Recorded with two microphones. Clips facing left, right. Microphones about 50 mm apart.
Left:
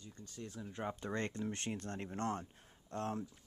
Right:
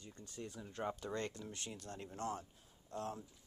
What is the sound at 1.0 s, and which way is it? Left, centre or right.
Speech, left.